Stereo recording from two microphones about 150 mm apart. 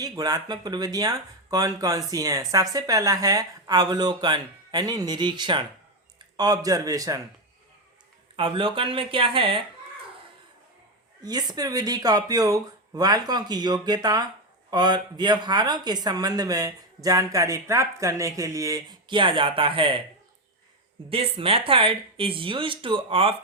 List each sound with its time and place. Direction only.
0.0 s speech: 25° right (ahead or behind)
8.4 s speech: 35° right (ahead or behind)
11.2 s speech: 25° right (ahead or behind)
21.1 s speech: 40° right (ahead or behind)